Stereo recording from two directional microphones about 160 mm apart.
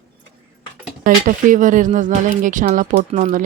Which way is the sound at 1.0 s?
55° right (ahead or behind).